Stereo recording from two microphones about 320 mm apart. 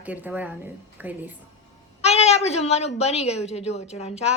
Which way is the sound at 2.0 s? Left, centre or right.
Centre.